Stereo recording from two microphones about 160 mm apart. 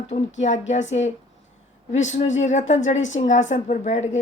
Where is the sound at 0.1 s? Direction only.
45° left (ahead or behind).